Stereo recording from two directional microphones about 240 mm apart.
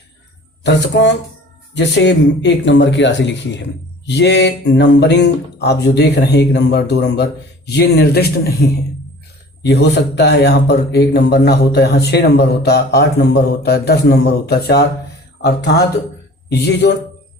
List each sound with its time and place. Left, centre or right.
0.6 s speech: left
9.6 s speech: left